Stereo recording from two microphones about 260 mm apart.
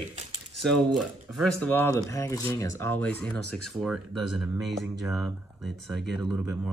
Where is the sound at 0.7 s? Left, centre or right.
Centre.